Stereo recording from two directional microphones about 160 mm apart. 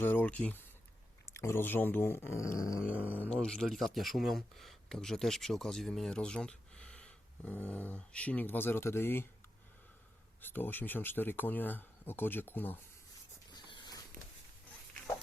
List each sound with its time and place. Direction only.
0.0 s speech: 10° left (ahead or behind)
2.9 s speech: 10° right (ahead or behind)
3.2 s speech: 5° left (ahead or behind)
10.4 s speech: 10° left (ahead or behind)
13.5 s a sound: 25° left (ahead or behind)